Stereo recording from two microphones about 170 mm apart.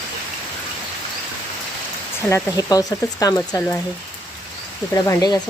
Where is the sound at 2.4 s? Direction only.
20° left (ahead or behind).